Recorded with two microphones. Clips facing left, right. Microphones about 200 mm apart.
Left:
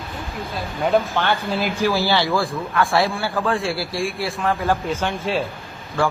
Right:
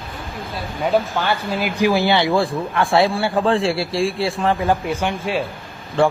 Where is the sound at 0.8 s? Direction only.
Centre (ahead or behind).